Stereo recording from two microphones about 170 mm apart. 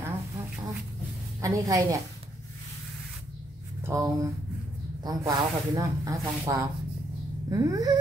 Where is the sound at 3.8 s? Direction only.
15° right (ahead or behind).